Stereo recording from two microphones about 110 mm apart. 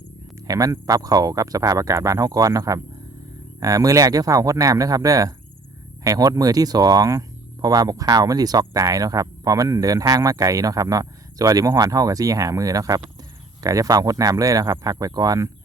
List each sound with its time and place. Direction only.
0.4 s speech: 35° right (ahead or behind)